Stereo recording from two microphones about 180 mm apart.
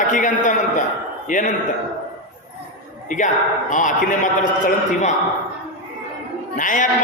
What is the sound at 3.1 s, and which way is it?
A man's voice, 45° left (ahead or behind).